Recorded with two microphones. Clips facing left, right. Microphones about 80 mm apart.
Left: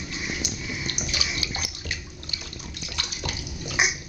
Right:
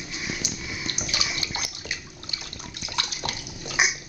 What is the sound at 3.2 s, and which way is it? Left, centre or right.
Bathtub, right.